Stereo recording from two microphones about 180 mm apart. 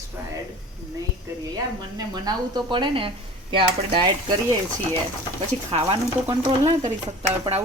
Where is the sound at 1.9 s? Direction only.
20° right (ahead or behind).